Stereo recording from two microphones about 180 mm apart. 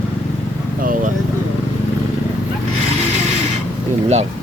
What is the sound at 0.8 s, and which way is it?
Speech, 50° right (ahead or behind).